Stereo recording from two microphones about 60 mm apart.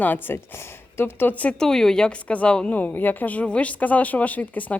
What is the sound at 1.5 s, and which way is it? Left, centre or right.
Speech, centre.